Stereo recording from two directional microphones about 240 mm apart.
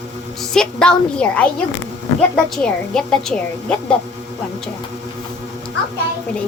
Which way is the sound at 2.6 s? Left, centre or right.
Centre.